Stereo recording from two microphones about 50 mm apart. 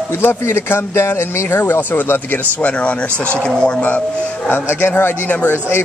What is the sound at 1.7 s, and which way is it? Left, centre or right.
Speech, left.